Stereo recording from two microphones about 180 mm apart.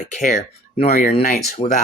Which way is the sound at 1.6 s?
30° left (ahead or behind).